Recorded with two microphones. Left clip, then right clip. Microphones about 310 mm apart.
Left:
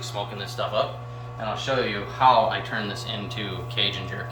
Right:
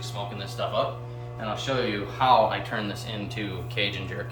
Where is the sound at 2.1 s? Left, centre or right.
Centre.